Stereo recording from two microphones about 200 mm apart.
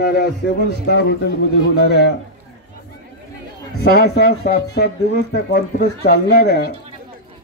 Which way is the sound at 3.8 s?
50° left (ahead or behind).